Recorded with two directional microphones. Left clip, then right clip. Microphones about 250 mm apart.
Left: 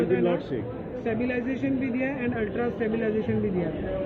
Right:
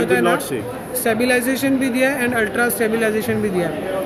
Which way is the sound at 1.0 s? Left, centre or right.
Right.